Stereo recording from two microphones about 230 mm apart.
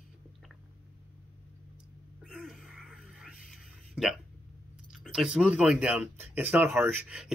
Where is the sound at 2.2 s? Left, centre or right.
Centre.